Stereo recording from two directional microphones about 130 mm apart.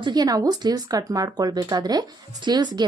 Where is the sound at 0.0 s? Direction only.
30° right (ahead or behind).